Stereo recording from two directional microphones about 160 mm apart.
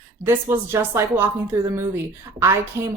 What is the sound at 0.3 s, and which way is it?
A woman's voice, 15° right (ahead or behind).